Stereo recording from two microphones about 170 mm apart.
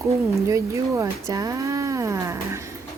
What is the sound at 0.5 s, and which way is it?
Speech, 15° right (ahead or behind).